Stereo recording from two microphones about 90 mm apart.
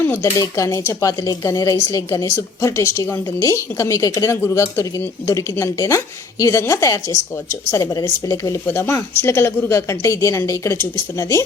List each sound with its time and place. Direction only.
0.2 s speech: 35° left (ahead or behind)
4.4 s speech: 30° left (ahead or behind)
8.6 s speech: 25° left (ahead or behind)